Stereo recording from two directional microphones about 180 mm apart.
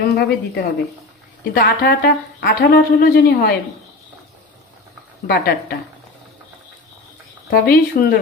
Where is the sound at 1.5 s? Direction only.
60° left (ahead or behind).